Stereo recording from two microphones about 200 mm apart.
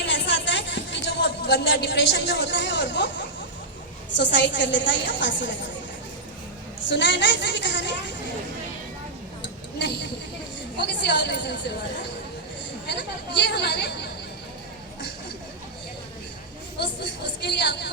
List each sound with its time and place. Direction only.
0.0 s music: 60° left (ahead or behind)
4.2 s a woman's voice: 60° left (ahead or behind)
6.8 s a woman's voice: 60° left (ahead or behind)
9.7 s a sound: 60° left (ahead or behind)
10.8 s a woman's voice: 60° left (ahead or behind)
12.9 s a woman's voice: 60° left (ahead or behind)
16.7 s a sound: 55° left (ahead or behind)